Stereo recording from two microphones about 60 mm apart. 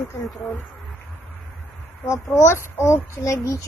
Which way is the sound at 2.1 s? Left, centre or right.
Left.